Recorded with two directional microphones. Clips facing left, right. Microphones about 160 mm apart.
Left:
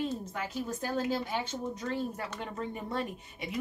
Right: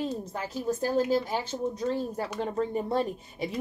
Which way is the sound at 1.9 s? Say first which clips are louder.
Right 4 dB; 35° right (ahead or behind).